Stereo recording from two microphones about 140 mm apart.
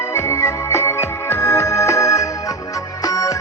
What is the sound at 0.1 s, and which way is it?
Music, 20° left (ahead or behind).